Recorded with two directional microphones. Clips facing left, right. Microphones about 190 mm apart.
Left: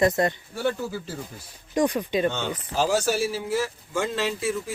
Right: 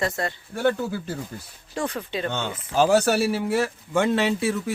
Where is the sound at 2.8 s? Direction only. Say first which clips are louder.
Right 4 dB; 60° right (ahead or behind).